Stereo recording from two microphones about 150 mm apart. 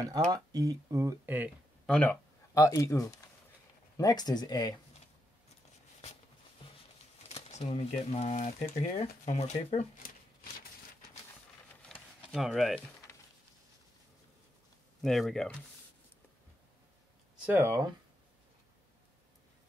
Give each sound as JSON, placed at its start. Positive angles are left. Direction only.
{"t": 0.0, "sound": "speech", "side_deg": -25}
{"t": 1.9, "sound": "speech", "side_deg": 10}
{"t": 2.5, "sound": "speech", "side_deg": 20}
{"t": 7.2, "sound": "speech", "side_deg": 45}
{"t": 11.7, "sound": "a sound", "side_deg": 10}
{"t": 15.0, "sound": "speech", "side_deg": 0}
{"t": 17.5, "sound": "speech", "side_deg": -15}